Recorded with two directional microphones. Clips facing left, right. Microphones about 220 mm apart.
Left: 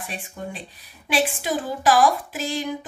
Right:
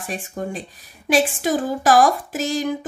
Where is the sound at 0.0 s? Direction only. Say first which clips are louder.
Right 6 dB; 45° right (ahead or behind).